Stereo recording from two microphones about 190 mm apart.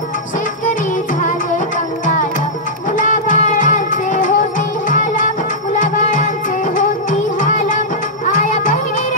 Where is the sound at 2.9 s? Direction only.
40° left (ahead or behind).